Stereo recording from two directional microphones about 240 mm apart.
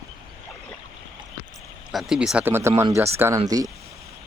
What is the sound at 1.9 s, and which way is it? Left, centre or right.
Speech, centre.